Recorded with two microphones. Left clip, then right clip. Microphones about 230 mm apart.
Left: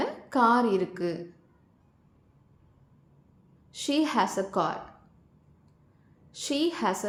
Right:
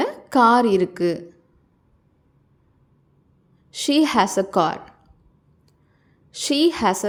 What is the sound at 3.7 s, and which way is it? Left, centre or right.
A woman's voice, right.